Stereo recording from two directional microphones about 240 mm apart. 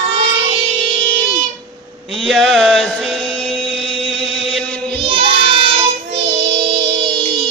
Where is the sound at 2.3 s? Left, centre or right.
Centre.